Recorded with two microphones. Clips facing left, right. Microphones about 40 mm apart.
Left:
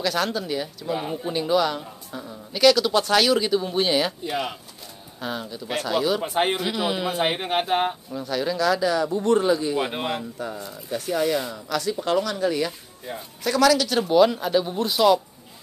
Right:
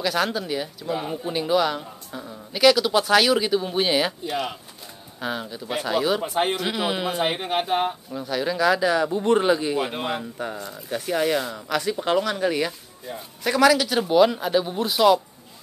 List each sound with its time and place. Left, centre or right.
0.0 s a man's voice: centre
4.2 s speech: centre
5.2 s a man's voice: centre
6.2 s speech: centre
6.6 s a man's voice: centre
7.2 s speech: centre
8.1 s speech: centre; by 9.8 s right
9.8 s speech: centre
10.4 s a man's voice: right; by 15.1 s centre